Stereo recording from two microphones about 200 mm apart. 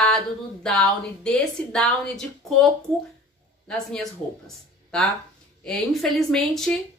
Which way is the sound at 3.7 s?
5° left (ahead or behind).